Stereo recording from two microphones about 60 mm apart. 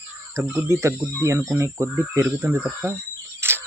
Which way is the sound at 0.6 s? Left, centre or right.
Right.